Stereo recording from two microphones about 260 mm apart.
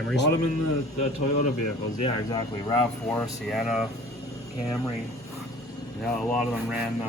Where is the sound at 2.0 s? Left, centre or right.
Centre.